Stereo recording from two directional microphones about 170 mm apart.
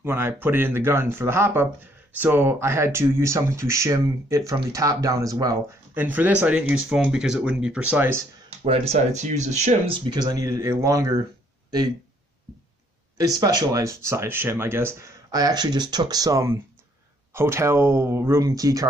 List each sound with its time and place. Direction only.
0.0 s speech: 15° right (ahead or behind)
6.0 s speech: 10° right (ahead or behind)
8.6 s speech: 35° right (ahead or behind); by 11.2 s 20° right (ahead or behind)
13.4 s speech: 20° right (ahead or behind)